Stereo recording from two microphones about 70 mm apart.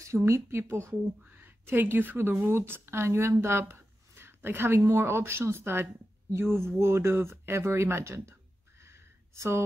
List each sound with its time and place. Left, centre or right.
0.0 s speech: right
1.3 s speech: right
8.8 s a sound: right